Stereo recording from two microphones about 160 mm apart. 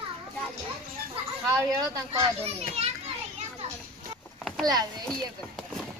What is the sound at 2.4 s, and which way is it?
Speech, 40° right (ahead or behind).